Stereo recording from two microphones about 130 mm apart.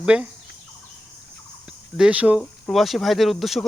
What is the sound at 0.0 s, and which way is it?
Speech, 10° right (ahead or behind).